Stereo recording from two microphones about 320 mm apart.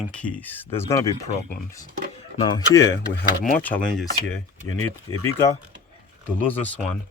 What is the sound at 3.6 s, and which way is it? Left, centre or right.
Speech, centre.